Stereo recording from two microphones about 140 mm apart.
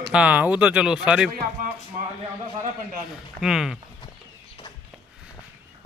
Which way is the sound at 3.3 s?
5° right (ahead or behind).